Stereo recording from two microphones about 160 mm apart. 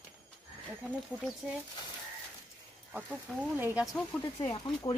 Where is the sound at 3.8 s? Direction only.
5° left (ahead or behind).